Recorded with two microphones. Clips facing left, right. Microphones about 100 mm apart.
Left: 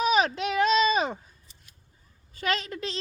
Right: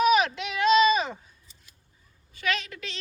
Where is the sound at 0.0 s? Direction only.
35° left (ahead or behind).